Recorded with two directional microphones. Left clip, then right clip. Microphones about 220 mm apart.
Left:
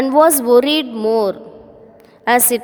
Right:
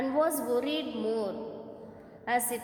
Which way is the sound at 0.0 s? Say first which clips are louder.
Left 16 dB; 45° left (ahead or behind).